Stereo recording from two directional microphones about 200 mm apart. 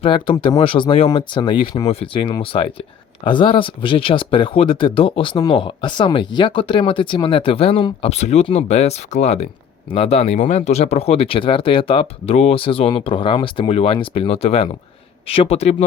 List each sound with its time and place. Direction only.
0.0 s speech: 25° left (ahead or behind)